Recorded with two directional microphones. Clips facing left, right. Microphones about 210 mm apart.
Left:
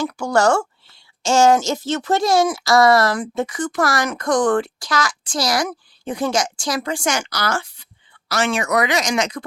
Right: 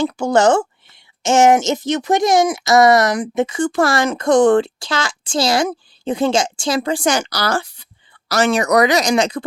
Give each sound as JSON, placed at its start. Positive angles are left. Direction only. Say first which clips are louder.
{"t": 0.0, "sound": "a woman's voice", "louder": "right 3 dB", "side_deg": -25}